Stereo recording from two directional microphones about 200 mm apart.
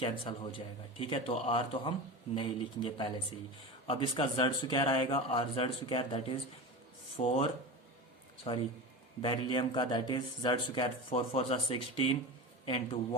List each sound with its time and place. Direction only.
0.0 s a man's voice: 25° left (ahead or behind)